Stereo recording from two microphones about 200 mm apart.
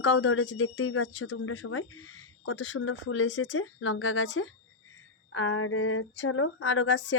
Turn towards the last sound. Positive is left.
turn(degrees=70)  # may be behind; listen again after turning